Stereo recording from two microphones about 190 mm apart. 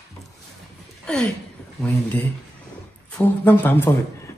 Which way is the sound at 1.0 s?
5° left (ahead or behind).